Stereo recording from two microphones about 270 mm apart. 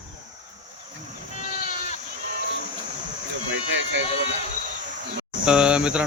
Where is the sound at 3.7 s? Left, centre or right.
Right.